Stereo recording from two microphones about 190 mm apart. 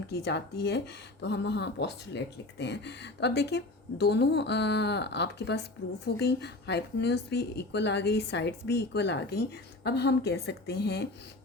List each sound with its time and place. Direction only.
0.1 s speech: 60° left (ahead or behind)